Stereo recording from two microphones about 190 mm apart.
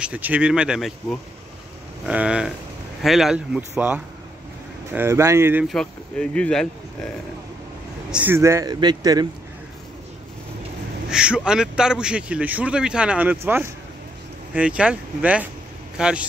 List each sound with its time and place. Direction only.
0.0 s a man's voice: 10° right (ahead or behind)
2.0 s a man's voice: 5° right (ahead or behind)
5.7 s a man's voice: 5° left (ahead or behind)
8.1 s a man's voice: 10° right (ahead or behind)
11.1 s a man's voice: 5° right (ahead or behind)